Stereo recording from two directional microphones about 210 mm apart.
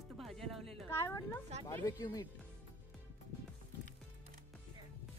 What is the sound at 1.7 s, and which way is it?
Speech, 15° left (ahead or behind).